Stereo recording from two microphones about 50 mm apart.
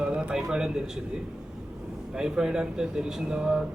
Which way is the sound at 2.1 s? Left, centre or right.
Centre.